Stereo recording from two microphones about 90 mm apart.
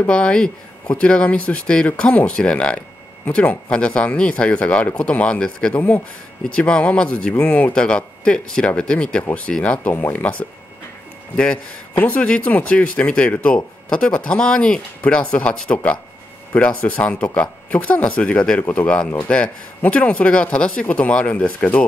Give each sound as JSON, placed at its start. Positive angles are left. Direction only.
{"t": 0.0, "sound": "speech", "side_deg": 10}
{"t": 5.8, "sound": "speech", "side_deg": 20}